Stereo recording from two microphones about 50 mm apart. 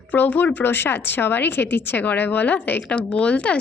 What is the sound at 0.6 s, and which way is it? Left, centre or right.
A woman's voice, left.